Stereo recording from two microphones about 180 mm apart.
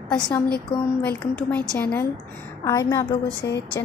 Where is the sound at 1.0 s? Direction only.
10° left (ahead or behind).